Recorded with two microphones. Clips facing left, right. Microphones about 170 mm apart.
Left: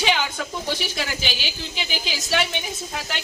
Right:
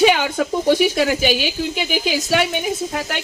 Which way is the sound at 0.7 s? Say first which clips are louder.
Right 12 dB; 50° right (ahead or behind).